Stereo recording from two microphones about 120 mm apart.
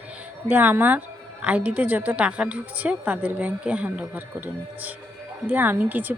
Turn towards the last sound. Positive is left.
turn(degrees=-15)  # may be behind; listen again after turning